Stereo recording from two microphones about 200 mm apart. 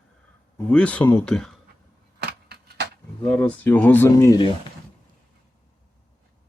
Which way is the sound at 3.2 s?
5° left (ahead or behind).